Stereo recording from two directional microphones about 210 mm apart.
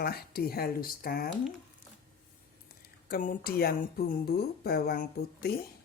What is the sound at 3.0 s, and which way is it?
Speech, 40° left (ahead or behind).